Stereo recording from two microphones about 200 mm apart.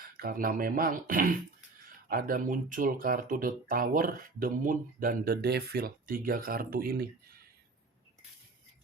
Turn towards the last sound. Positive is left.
turn(degrees=-45)  # may be behind; listen again after turning